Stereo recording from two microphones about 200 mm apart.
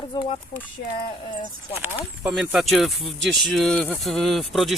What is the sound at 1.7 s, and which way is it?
Speech, 10° right (ahead or behind).